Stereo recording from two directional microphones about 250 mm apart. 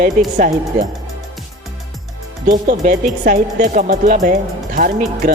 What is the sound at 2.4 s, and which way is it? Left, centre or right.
Speech, right.